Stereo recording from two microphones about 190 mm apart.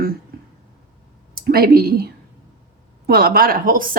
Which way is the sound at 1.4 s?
50° right (ahead or behind).